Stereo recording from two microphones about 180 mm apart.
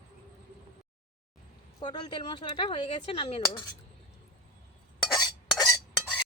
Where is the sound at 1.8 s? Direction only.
25° left (ahead or behind).